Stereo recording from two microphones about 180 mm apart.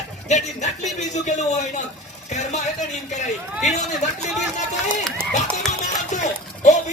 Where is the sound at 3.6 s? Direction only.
40° left (ahead or behind).